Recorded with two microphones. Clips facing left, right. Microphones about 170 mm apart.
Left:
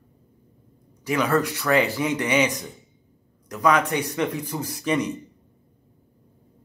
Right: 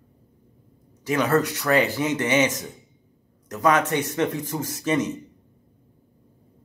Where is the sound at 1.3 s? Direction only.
20° right (ahead or behind).